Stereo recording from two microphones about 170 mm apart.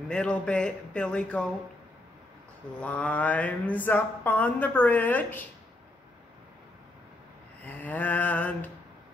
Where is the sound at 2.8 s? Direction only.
10° left (ahead or behind).